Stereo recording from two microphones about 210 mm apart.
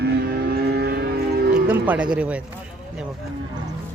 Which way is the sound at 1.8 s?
5° right (ahead or behind).